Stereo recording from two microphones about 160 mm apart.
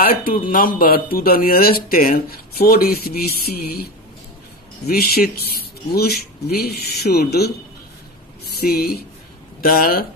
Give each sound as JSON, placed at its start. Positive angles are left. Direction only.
{"t": 0.0, "sound": "speech", "side_deg": 65}
{"t": 8.5, "sound": "speech", "side_deg": 75}